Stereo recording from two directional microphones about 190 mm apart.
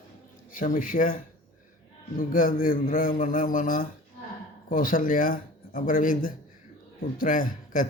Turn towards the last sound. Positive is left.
turn(degrees=45)  # may be behind; listen again after turning